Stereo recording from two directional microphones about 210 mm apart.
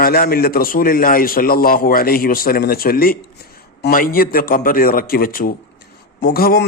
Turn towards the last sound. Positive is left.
turn(degrees=45)  # may be behind; listen again after turning